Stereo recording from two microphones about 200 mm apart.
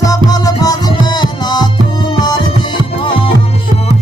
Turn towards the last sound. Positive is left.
turn(degrees=25)  # may be behind; listen again after turning